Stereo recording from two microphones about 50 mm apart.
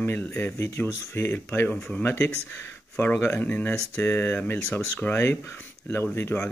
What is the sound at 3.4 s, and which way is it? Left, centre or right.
Speech, left.